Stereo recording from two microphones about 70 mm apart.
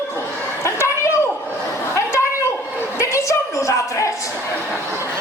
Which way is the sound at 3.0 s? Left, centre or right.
Left.